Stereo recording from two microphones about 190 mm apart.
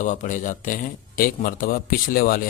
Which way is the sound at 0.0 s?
40° left (ahead or behind).